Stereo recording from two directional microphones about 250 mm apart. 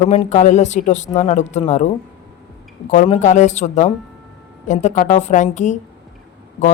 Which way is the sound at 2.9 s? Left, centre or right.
Left.